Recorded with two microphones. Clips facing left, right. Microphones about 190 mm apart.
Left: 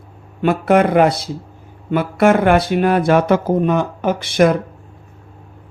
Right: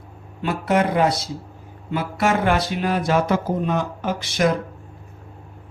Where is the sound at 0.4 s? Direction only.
60° left (ahead or behind).